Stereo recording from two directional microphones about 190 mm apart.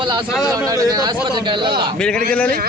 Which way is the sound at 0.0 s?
25° right (ahead or behind).